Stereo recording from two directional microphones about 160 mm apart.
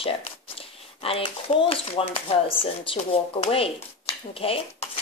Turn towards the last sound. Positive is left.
turn(degrees=35)  # may be behind; listen again after turning